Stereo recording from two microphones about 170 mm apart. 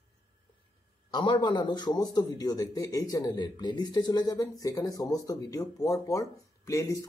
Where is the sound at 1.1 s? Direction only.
25° left (ahead or behind).